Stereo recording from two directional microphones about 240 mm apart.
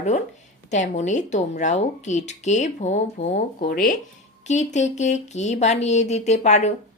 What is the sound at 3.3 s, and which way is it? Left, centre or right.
Speech, left.